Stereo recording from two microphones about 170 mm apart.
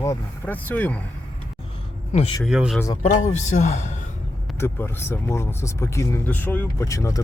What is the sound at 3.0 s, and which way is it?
Speech, 45° left (ahead or behind).